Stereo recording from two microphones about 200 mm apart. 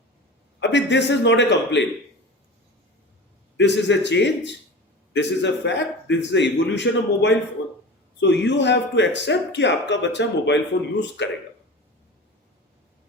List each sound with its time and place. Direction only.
0.6 s speech: 60° left (ahead or behind)
3.6 s speech: 60° left (ahead or behind)